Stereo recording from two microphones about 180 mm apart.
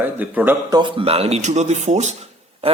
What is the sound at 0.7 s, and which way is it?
Speech, 30° right (ahead or behind).